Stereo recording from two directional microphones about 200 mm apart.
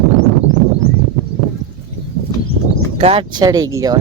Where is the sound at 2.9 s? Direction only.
30° right (ahead or behind).